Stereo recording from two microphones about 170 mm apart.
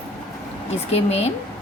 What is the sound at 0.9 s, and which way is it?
Speech, 40° left (ahead or behind).